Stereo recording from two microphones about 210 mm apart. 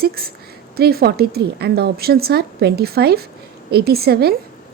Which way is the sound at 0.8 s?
45° right (ahead or behind).